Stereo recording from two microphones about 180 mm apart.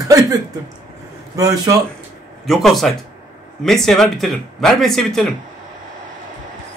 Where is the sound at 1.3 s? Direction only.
20° right (ahead or behind).